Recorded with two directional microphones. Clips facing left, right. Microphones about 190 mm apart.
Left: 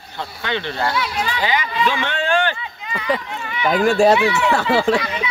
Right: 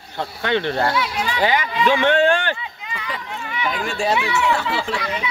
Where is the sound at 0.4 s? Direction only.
55° right (ahead or behind).